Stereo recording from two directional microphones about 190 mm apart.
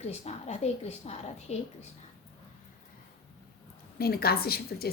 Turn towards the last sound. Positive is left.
turn(degrees=55)  # may be behind; listen again after turning